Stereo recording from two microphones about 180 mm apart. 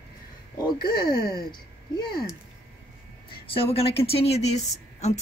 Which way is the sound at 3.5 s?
30° left (ahead or behind).